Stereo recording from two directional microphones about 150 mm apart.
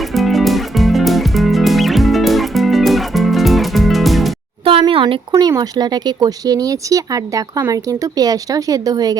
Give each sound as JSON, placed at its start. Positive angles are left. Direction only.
{"t": 0.1, "sound": "music", "side_deg": 0}
{"t": 4.6, "sound": "a sound", "side_deg": -40}
{"t": 5.3, "sound": "speech", "side_deg": -25}